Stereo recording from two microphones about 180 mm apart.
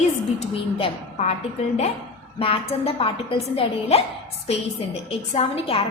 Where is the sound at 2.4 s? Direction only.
30° left (ahead or behind).